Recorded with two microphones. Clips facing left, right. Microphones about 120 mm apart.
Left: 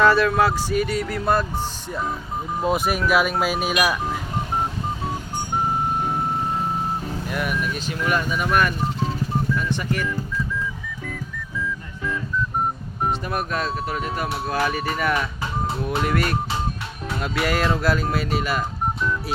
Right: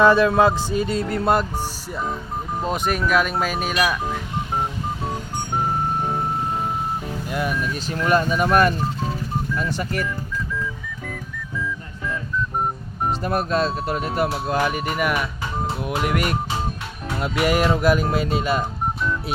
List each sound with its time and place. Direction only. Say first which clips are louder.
0.0 s speech: right 2 dB; 20° right (ahead or behind)
2.6 s speech: left 2 dB; 5° left (ahead or behind)
7.3 s speech: right 2 dB; 30° right (ahead or behind)
13.1 s speech: right 3 dB; 35° right (ahead or behind)